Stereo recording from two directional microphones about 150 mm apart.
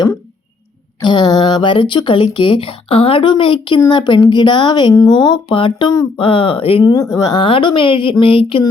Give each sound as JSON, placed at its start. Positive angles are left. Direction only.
{"t": 1.0, "sound": "speech", "side_deg": 30}
{"t": 6.9, "sound": "speech", "side_deg": 20}